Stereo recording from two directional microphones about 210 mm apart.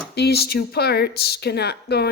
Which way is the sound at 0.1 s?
50° left (ahead or behind).